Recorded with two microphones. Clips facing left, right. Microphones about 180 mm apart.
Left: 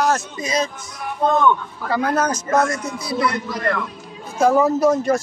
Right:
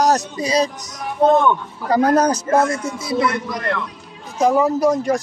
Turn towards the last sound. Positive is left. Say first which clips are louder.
# even
turn(degrees=-15)  # may be behind; listen again after turning